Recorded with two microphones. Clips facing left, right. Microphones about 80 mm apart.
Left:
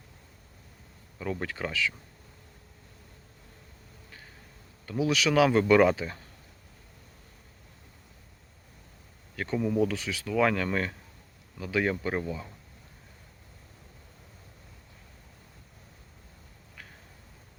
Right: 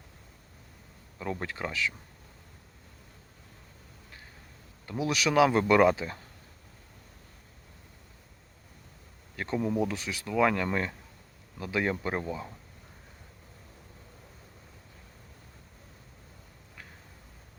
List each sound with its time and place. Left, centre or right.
1.2 s speech: centre
4.9 s speech: centre
9.6 s speech: right